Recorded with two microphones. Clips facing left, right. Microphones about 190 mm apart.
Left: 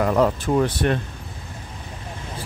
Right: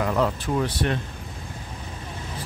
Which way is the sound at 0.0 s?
50° left (ahead or behind).